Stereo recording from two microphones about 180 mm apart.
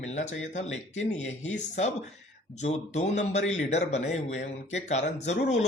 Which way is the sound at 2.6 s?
40° left (ahead or behind).